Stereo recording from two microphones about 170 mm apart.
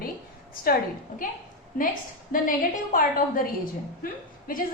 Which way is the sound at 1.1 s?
50° left (ahead or behind).